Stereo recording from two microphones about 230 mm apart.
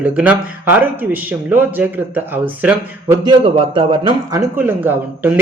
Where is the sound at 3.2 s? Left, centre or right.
Right.